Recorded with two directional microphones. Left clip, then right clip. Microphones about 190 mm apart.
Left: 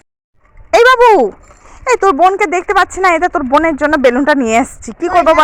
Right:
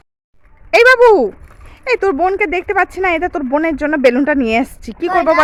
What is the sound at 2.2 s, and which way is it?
A woman's voice, 15° right (ahead or behind).